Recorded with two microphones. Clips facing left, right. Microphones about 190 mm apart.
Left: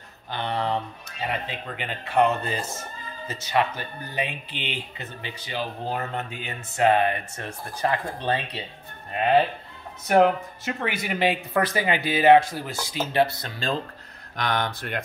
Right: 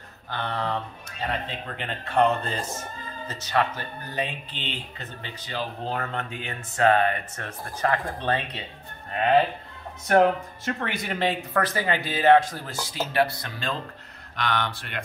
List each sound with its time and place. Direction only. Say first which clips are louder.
0.3 s speech: left 2 dB; 15° left (ahead or behind)
10.0 s speech: left 1 dB; 5° left (ahead or behind); by 13.7 s 30° left (ahead or behind)
14.3 s speech: left 1 dB; 45° left (ahead or behind)